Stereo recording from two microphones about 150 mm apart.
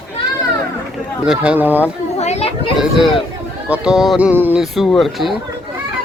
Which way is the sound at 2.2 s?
45° left (ahead or behind).